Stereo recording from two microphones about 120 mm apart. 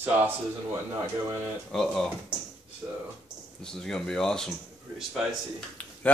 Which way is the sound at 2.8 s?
15° right (ahead or behind).